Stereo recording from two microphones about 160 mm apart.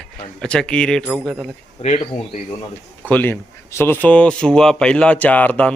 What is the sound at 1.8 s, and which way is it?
Speech, 40° left (ahead or behind).